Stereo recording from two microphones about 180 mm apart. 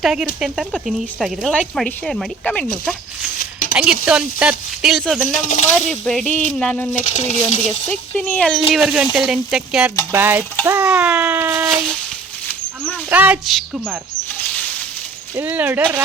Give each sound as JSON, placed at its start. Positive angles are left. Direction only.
{"t": 0.0, "sound": "speech", "side_deg": -5}
{"t": 3.8, "sound": "speech", "side_deg": -5}
{"t": 5.4, "sound": "speech", "side_deg": 45}
{"t": 6.1, "sound": "speech", "side_deg": 5}
{"t": 7.0, "sound": "speech", "side_deg": 45}
{"t": 7.9, "sound": "a child's voice", "side_deg": 10}
{"t": 13.1, "sound": "a child's voice", "side_deg": -10}
{"t": 13.4, "sound": "speech", "side_deg": 0}
{"t": 15.4, "sound": "a child's voice", "side_deg": -10}